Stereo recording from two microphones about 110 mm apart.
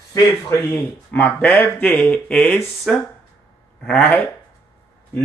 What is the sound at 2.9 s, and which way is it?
Speech, 5° left (ahead or behind).